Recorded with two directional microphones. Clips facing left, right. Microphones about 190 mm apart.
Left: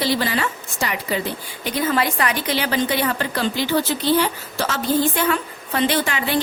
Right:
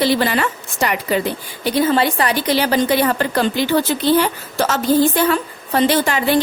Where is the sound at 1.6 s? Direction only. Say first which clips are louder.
Right 5 dB; 30° right (ahead or behind).